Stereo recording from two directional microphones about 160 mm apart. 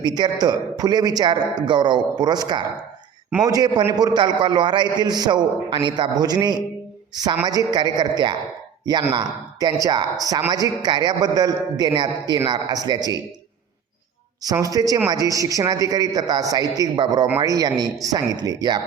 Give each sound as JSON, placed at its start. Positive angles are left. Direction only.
{"t": 0.0, "sound": "a man's voice", "side_deg": -25}
{"t": 14.4, "sound": "a man's voice", "side_deg": -20}